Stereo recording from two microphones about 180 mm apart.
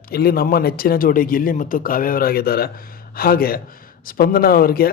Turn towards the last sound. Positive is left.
turn(degrees=55)  # may be behind; listen again after turning